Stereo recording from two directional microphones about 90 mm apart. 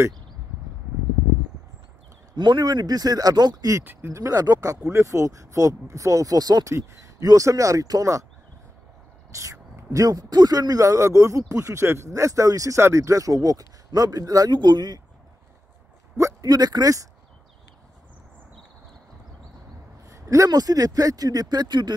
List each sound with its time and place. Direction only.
2.3 s speech: 55° right (ahead or behind)
3.8 s speech: 25° right (ahead or behind)
4.2 s speech: 40° right (ahead or behind)
9.3 s speech: 35° right (ahead or behind)
14.5 s speech: 55° right (ahead or behind)
16.2 s a sound: 35° right (ahead or behind)
16.4 s speech: 50° right (ahead or behind)
20.1 s speech: 40° right (ahead or behind); by 21.9 s 55° right (ahead or behind)